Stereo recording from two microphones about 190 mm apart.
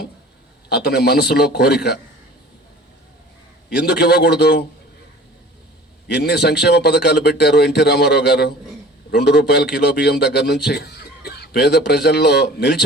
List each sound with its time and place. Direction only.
0.7 s a man's voice: 55° left (ahead or behind)
3.7 s a man's voice: 60° left (ahead or behind)
6.1 s a man's voice: 60° left (ahead or behind)